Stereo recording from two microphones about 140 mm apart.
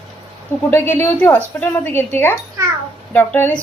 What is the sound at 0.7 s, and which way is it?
Speech, 15° left (ahead or behind).